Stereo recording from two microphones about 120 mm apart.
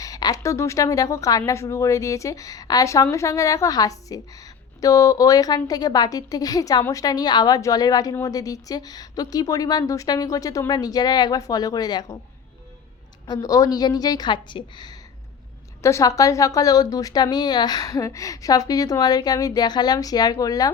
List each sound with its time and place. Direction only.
0.0 s a woman's voice: 30° left (ahead or behind)
13.2 s a woman's voice: 35° left (ahead or behind)
15.8 s a woman's voice: 25° left (ahead or behind)